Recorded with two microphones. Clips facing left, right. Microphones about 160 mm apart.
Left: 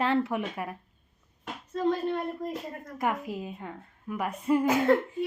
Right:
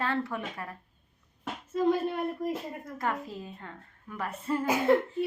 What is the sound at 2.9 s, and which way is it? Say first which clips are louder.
A woman's voice: left 4 dB; 15° left (ahead or behind).